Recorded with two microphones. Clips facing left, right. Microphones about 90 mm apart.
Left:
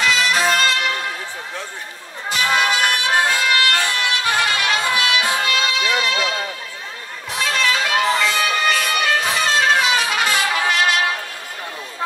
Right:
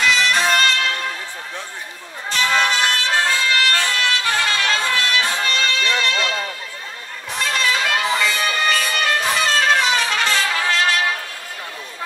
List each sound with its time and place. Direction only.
0.0 s music: centre (ahead or behind)
2.2 s music: 10° left (ahead or behind)